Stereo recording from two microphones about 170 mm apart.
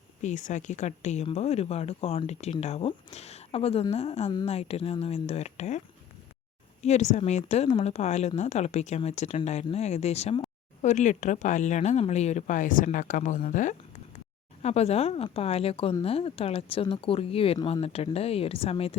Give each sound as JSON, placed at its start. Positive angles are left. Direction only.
{"t": 0.2, "sound": "a woman's voice", "side_deg": 45}
{"t": 6.8, "sound": "a woman's voice", "side_deg": 40}
{"t": 14.6, "sound": "a woman's voice", "side_deg": 40}